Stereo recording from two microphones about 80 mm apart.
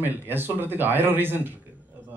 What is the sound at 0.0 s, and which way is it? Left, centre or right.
A man's voice, right.